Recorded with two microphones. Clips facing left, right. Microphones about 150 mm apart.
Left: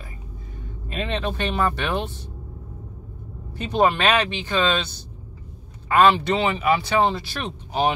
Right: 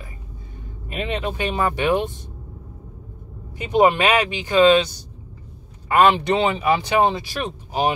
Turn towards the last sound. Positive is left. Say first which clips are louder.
# right 1 dB
turn(degrees=-10)  # may be behind; listen again after turning